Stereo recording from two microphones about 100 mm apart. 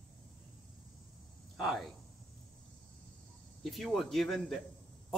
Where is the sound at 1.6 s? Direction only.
Centre (ahead or behind).